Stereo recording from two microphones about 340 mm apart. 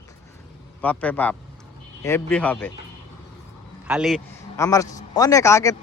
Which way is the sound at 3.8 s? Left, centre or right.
Centre.